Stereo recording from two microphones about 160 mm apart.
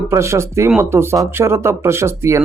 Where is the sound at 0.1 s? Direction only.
15° right (ahead or behind).